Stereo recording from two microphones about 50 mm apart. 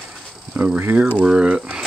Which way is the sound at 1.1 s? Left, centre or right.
Right.